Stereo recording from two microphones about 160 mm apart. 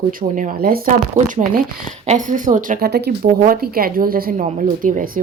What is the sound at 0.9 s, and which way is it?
A woman's voice, 55° right (ahead or behind).